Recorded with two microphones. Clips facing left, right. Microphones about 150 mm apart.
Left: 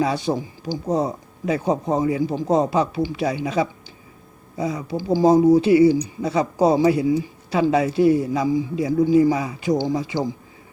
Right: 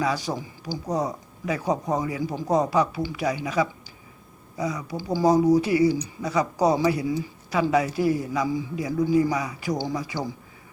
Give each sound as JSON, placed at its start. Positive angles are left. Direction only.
{"t": 0.0, "sound": "speech", "side_deg": 25}